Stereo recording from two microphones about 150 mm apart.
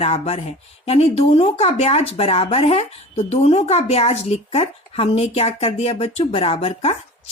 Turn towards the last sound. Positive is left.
turn(degrees=40)  # may be behind; listen again after turning